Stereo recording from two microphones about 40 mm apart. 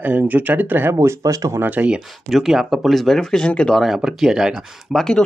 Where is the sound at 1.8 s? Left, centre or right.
Right.